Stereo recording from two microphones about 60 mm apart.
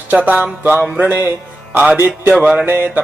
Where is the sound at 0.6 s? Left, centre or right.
Right.